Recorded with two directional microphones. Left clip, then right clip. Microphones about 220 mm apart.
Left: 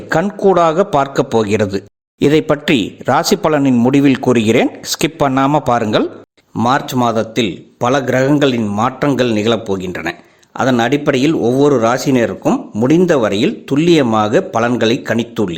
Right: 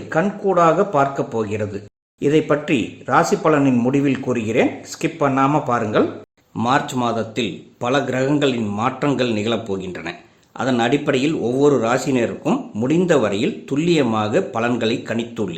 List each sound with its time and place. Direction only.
0.1 s speech: 45° left (ahead or behind)
6.6 s speech: 30° left (ahead or behind)